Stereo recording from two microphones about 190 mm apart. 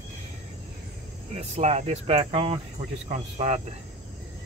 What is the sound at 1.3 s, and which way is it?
Speech, 35° right (ahead or behind).